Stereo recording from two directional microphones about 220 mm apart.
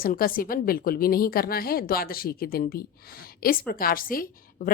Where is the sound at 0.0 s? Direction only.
40° left (ahead or behind).